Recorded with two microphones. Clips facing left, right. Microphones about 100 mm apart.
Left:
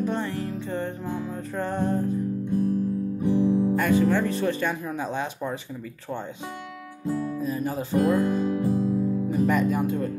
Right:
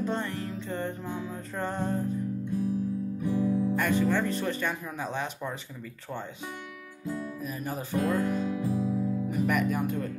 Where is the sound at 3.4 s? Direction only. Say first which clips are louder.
Left 5 dB; 30° left (ahead or behind).